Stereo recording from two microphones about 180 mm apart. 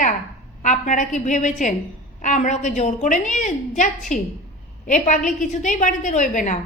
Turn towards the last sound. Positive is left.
turn(degrees=45)  # may be behind; listen again after turning